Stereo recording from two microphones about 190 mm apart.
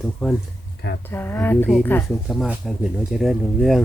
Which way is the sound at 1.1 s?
10° left (ahead or behind).